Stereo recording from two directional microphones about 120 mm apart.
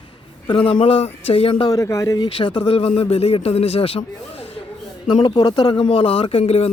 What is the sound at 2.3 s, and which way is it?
Speech, 50° left (ahead or behind).